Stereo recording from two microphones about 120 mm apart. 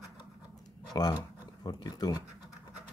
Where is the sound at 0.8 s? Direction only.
35° left (ahead or behind).